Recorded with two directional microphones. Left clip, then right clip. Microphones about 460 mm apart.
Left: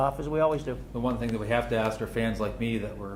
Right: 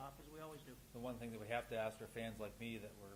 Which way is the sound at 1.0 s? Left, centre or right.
Right.